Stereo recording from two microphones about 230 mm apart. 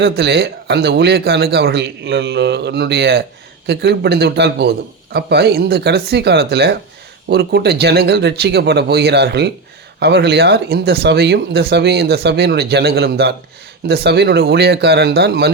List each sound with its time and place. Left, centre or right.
0.0 s speech: right